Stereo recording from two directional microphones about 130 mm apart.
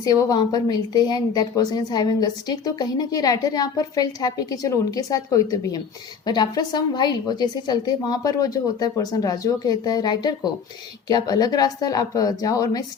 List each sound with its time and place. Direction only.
0.0 s a woman's voice: 30° left (ahead or behind)